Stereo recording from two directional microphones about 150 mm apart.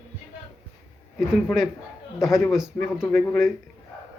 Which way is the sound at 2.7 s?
10° left (ahead or behind).